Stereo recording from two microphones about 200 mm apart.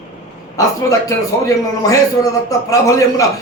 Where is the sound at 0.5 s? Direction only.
15° left (ahead or behind).